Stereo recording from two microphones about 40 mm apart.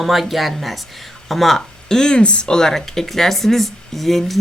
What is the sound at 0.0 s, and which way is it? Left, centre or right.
Speech, centre.